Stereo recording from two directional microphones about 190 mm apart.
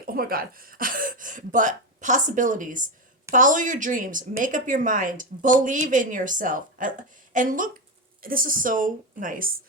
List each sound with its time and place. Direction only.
0.0 s speech: 50° right (ahead or behind)